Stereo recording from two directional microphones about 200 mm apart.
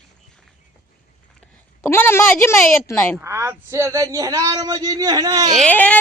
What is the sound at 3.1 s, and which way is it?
A man's voice, 10° right (ahead or behind).